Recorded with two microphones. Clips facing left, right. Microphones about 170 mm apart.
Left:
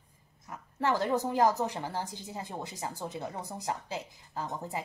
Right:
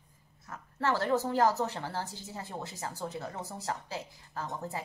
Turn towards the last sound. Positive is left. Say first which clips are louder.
# left 1 dB
turn(degrees=15)  # may be behind; listen again after turning